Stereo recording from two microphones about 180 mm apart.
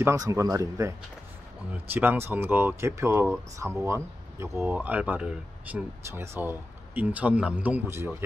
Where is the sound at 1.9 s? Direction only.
10° right (ahead or behind).